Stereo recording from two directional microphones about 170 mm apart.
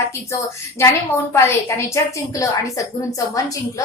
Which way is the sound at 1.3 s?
15° left (ahead or behind).